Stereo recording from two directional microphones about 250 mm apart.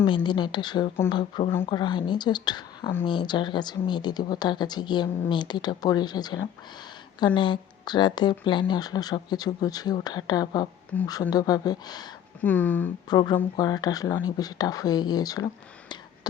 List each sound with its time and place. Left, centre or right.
0.0 s speech: centre